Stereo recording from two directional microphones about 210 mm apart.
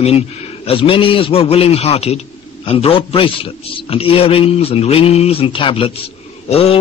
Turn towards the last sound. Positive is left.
turn(degrees=30)  # may be behind; listen again after turning